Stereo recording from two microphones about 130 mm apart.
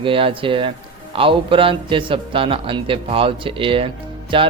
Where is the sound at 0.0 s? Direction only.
40° right (ahead or behind).